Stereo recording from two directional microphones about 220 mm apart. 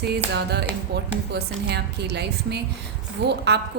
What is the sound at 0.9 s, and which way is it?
A woman's voice, 50° right (ahead or behind).